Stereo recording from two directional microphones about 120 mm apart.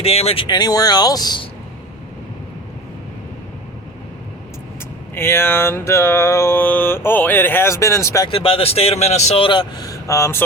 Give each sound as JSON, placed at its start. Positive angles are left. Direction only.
{"t": 0.0, "sound": "speech", "side_deg": 55}
{"t": 0.4, "sound": "speech", "side_deg": 35}
{"t": 5.1, "sound": "mantra", "side_deg": 20}
{"t": 8.3, "sound": "speech", "side_deg": 50}
{"t": 9.4, "sound": "speech", "side_deg": 45}
{"t": 10.1, "sound": "mantra", "side_deg": 25}